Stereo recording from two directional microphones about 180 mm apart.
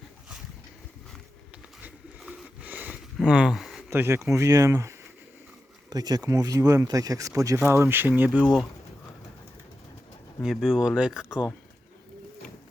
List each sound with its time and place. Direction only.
1.8 s a sound: 10° right (ahead or behind)
3.8 s speech: 15° right (ahead or behind)
10.4 s speech: centre (ahead or behind)